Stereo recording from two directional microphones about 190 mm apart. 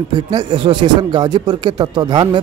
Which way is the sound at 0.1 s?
25° right (ahead or behind).